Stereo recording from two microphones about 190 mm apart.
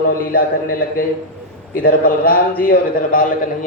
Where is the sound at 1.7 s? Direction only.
50° left (ahead or behind).